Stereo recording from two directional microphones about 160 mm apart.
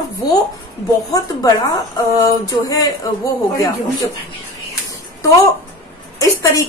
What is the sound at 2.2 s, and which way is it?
Speech, 20° left (ahead or behind).